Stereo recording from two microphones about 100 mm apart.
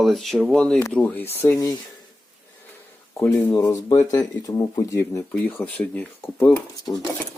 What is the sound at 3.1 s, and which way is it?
Speech, 30° left (ahead or behind).